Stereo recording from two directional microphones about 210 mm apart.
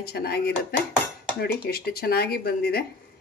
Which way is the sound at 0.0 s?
50° left (ahead or behind).